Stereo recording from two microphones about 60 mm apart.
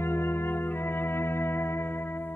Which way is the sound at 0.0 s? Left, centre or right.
Left.